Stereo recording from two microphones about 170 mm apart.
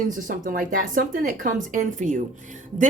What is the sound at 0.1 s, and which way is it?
A woman's voice, 50° right (ahead or behind).